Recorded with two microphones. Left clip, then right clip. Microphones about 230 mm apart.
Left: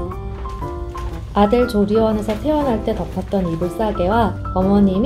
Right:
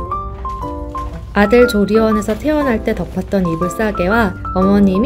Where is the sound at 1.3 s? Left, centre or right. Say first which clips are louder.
Right 5 dB; right.